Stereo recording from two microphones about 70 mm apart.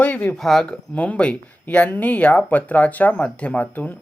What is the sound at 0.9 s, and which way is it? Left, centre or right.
Speech, left.